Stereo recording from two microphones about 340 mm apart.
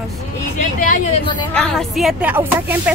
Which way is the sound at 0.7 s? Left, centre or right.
Left.